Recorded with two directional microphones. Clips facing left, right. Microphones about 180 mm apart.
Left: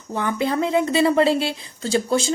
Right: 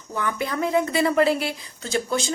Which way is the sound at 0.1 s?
30° left (ahead or behind).